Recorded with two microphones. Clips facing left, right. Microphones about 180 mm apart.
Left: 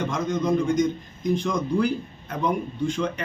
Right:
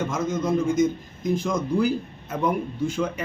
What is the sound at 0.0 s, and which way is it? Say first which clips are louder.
Speech: even; 5° right (ahead or behind).